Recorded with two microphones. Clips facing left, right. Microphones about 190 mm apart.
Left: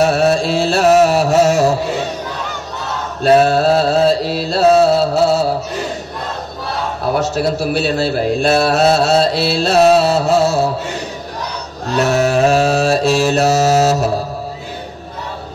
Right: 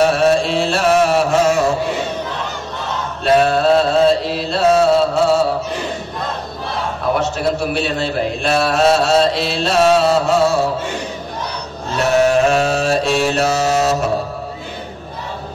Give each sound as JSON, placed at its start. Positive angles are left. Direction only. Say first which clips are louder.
{"t": 0.0, "sound": "music", "louder": "even", "side_deg": 40}
{"t": 3.2, "sound": "mantra", "louder": "left 3 dB", "side_deg": 40}
{"t": 7.2, "sound": "a man's voice", "louder": "left 4 dB", "side_deg": 40}
{"t": 12.1, "sound": "mantra", "louder": "right 1 dB", "side_deg": 40}